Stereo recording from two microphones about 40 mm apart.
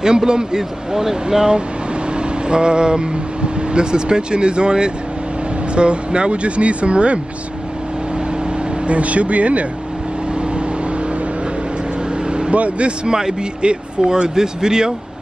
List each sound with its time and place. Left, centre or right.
0.0 s speech: centre
2.1 s vehicle: right
3.7 s speech: right
8.8 s speech: right
12.3 s vehicle: right
12.5 s speech: right
13.1 s speech: centre